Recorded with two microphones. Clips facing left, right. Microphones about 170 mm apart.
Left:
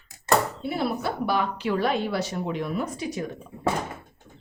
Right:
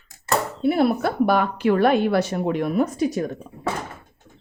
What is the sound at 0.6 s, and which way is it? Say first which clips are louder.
A woman's voice: right 8 dB; 55° right (ahead or behind).